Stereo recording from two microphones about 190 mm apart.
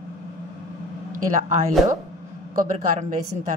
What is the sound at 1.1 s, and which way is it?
Speech, 40° right (ahead or behind).